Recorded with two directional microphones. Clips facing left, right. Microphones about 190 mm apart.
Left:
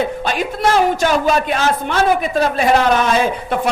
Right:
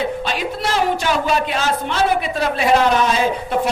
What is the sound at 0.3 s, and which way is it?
A man's voice, 50° left (ahead or behind).